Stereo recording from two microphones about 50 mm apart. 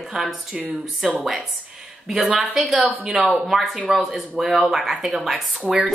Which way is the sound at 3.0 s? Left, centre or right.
Centre.